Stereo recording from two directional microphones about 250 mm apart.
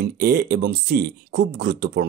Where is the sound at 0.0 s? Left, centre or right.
Right.